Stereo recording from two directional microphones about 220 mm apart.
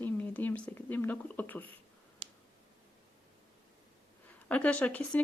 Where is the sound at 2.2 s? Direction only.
25° right (ahead or behind).